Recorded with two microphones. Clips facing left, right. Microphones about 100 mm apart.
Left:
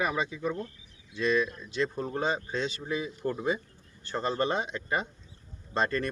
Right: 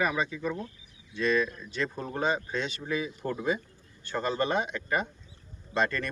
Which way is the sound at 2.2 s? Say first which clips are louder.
Right 2 dB; 25° left (ahead or behind).